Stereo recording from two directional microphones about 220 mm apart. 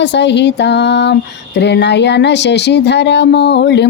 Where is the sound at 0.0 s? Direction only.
50° left (ahead or behind).